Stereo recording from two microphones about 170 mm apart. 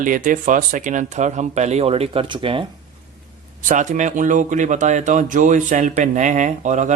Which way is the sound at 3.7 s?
45° right (ahead or behind).